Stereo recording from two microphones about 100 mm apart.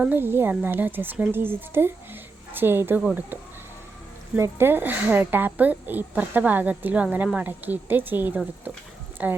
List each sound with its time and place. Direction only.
0.1 s speech: 20° right (ahead or behind)
4.4 s a woman's voice: 25° right (ahead or behind)